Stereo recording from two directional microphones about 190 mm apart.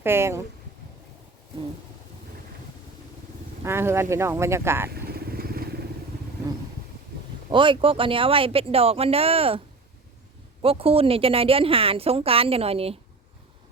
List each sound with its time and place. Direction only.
0.0 s speech: 15° right (ahead or behind)
3.6 s speech: 15° right (ahead or behind)
4.9 s vehicle: 55° right (ahead or behind)
7.5 s a woman's voice: 25° right (ahead or behind)
10.6 s a woman's voice: 30° right (ahead or behind)